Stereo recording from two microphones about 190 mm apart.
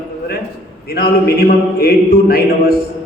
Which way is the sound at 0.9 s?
55° left (ahead or behind).